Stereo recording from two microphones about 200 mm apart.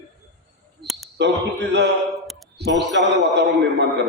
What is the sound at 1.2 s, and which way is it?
Speech, 60° right (ahead or behind).